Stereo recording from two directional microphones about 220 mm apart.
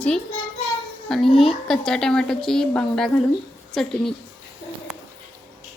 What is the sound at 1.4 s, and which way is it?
A woman's voice, centre (ahead or behind).